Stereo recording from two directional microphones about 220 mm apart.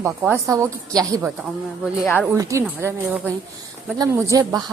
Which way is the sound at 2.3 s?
15° right (ahead or behind).